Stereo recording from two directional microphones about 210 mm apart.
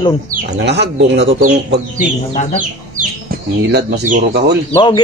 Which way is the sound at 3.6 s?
55° right (ahead or behind).